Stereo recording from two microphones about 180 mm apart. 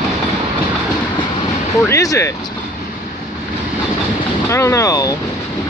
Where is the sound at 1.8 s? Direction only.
15° left (ahead or behind).